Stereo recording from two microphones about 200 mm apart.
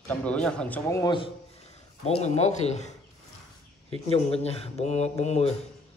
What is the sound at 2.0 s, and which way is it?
A man's voice, 35° left (ahead or behind).